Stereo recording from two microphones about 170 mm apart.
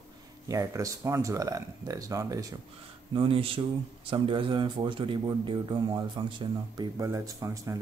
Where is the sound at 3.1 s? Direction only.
35° right (ahead or behind).